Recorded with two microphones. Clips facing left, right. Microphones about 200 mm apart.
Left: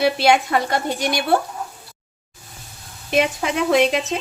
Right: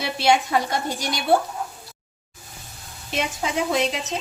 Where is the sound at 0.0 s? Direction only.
60° left (ahead or behind).